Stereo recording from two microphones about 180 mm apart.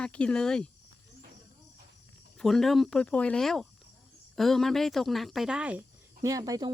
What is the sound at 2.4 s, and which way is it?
Speech, centre (ahead or behind).